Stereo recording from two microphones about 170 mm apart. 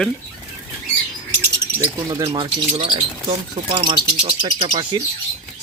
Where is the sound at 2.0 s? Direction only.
20° right (ahead or behind).